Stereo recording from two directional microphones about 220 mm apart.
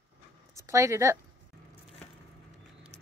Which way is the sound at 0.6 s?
15° right (ahead or behind).